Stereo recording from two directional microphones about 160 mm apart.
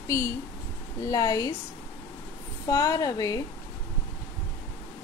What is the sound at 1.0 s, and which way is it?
Speech, 20° left (ahead or behind).